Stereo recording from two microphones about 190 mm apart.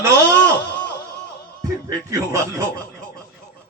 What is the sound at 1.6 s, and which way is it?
Speech, 15° right (ahead or behind).